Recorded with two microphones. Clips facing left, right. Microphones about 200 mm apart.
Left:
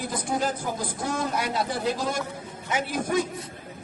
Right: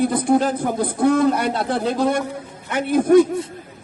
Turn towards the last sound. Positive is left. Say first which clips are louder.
# right 13 dB
turn(degrees=-60)  # may be behind; listen again after turning